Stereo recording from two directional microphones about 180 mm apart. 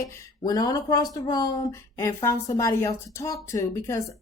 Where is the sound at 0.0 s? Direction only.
15° left (ahead or behind).